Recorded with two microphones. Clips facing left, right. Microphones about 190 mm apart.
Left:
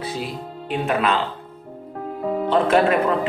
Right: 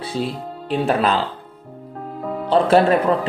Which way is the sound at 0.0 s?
30° right (ahead or behind).